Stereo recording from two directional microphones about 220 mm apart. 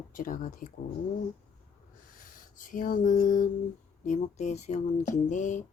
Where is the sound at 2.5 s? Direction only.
35° left (ahead or behind).